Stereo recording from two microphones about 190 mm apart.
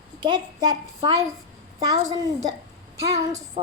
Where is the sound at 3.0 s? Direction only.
15° right (ahead or behind).